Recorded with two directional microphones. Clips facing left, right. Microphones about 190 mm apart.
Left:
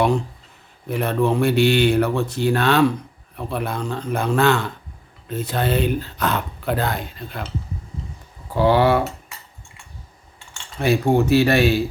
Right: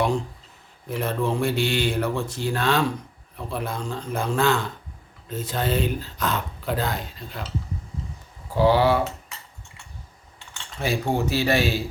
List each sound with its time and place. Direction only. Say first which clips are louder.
0.9 s speech: left 5 dB; 65° left (ahead or behind)
8.5 s speech: left 2 dB; 60° left (ahead or behind)
10.8 s speech: left 7 dB; 60° left (ahead or behind)